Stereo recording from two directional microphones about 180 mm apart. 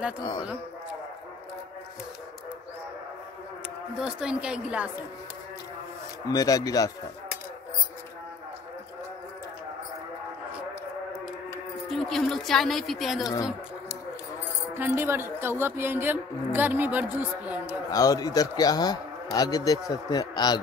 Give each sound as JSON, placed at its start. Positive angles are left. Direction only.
{"t": 0.2, "sound": "a man's voice", "side_deg": 25}
{"t": 3.9, "sound": "speech", "side_deg": -5}
{"t": 6.3, "sound": "a man's voice", "side_deg": 20}
{"t": 11.9, "sound": "speech", "side_deg": 0}
{"t": 13.2, "sound": "a man's voice", "side_deg": 20}
{"t": 14.7, "sound": "a woman's voice", "side_deg": -15}
{"t": 17.8, "sound": "a man's voice", "side_deg": 20}